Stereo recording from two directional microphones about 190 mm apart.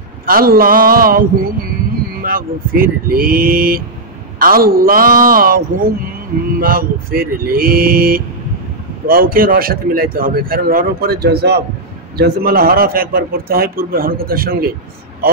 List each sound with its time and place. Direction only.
0.3 s speech: 50° right (ahead or behind)
2.2 s speech: 50° right (ahead or behind)